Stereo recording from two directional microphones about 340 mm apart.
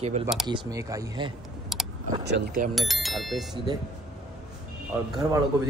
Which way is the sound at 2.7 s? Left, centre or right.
Centre.